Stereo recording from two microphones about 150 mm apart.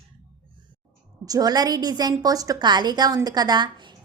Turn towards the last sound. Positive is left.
turn(degrees=-30)  # may be behind; listen again after turning